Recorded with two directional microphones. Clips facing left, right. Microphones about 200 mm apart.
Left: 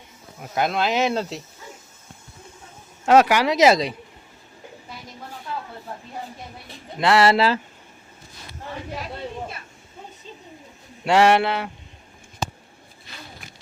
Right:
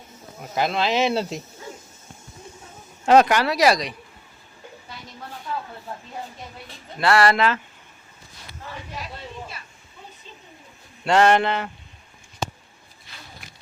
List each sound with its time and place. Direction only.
0.5 s speech: centre (ahead or behind)
3.1 s speech: 5° left (ahead or behind); by 3.9 s 25° left (ahead or behind)
7.0 s speech: 20° left (ahead or behind)
11.0 s speech: 10° left (ahead or behind)